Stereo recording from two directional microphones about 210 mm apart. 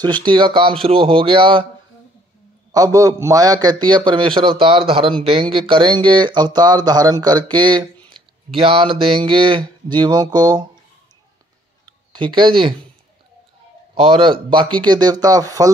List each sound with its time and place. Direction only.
0.0 s speech: 20° right (ahead or behind)
2.7 s speech: 15° right (ahead or behind)
12.1 s speech: 20° right (ahead or behind)
13.9 s speech: 25° right (ahead or behind)